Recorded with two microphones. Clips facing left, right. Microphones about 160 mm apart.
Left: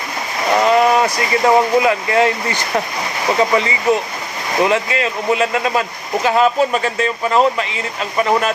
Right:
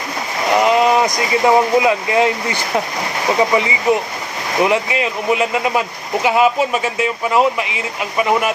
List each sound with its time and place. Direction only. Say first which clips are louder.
0.6 s speech: left 1 dB; 20° right (ahead or behind)